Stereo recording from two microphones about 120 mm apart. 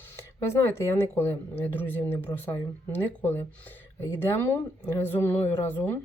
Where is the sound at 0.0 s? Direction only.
20° left (ahead or behind).